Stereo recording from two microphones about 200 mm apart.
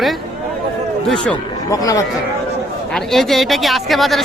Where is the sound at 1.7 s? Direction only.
15° left (ahead or behind).